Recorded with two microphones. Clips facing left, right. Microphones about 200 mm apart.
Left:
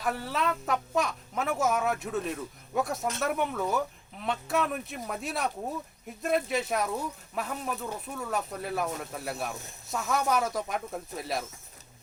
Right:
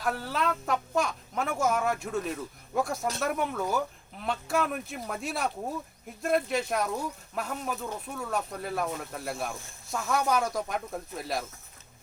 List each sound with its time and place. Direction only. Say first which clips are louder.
0.0 s speech: even; centre (ahead or behind)